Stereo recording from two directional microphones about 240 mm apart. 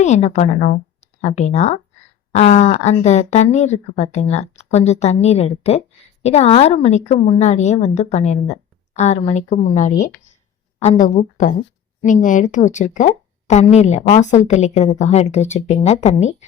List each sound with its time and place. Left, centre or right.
0.0 s speech: left